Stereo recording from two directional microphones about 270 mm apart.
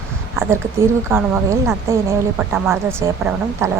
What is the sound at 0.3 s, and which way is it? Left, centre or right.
Speech, centre.